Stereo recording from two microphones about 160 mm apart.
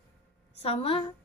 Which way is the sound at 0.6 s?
35° left (ahead or behind).